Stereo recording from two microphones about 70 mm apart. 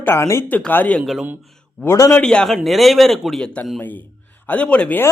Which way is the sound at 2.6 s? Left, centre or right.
Centre.